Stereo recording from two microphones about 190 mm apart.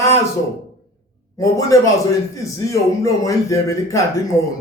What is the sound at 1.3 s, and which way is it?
Speech, 15° left (ahead or behind).